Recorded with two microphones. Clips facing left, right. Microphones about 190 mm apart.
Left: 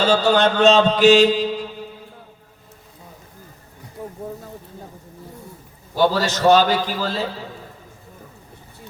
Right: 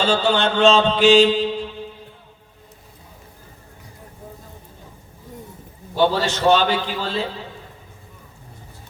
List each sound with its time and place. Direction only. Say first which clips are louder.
0.0 s mantra: left 3 dB; 40° left (ahead or behind)
6.1 s mantra: left 2 dB; 40° left (ahead or behind)